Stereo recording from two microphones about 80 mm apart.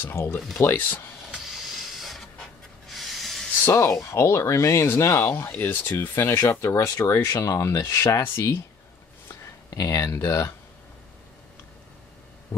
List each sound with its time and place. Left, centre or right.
0.0 s speech: left
1.3 s power windows: centre
2.9 s spray: centre
3.7 s speech: left
9.4 s speech: left